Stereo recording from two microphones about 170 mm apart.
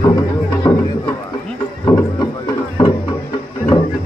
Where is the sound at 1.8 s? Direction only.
15° left (ahead or behind).